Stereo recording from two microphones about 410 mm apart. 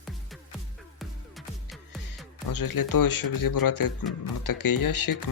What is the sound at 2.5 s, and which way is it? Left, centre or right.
Speech, left.